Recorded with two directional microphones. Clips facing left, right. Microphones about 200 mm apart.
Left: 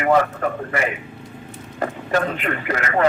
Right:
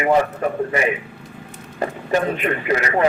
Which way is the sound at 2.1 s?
20° right (ahead or behind).